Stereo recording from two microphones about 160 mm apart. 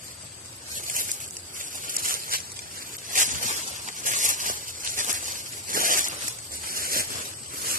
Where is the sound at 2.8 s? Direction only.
55° right (ahead or behind).